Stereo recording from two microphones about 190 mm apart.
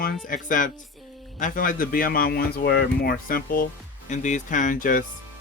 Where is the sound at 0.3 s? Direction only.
45° left (ahead or behind).